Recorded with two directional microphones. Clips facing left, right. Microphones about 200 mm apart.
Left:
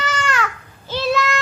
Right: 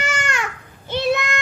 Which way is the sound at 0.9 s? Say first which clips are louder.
Even; 20° right (ahead or behind).